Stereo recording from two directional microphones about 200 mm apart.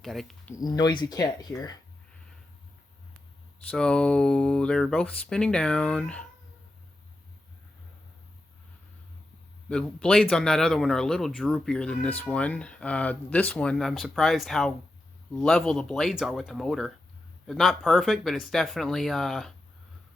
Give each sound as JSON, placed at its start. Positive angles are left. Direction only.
{"t": 0.0, "sound": "speech", "side_deg": 0}
{"t": 0.5, "sound": "speech", "side_deg": 20}
{"t": 3.7, "sound": "a man's voice", "side_deg": 5}
{"t": 9.6, "sound": "a man's voice", "side_deg": 5}